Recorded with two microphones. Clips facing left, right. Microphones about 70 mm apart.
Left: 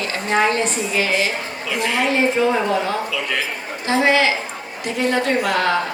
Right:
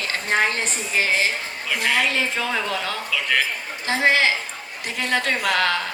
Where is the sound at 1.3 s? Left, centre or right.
Left.